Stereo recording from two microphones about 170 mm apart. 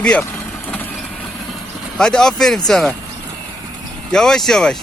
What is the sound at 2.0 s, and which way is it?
Speech, 5° left (ahead or behind).